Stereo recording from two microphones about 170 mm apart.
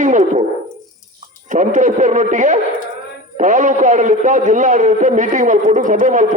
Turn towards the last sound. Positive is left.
turn(degrees=-50)  # may be behind; listen again after turning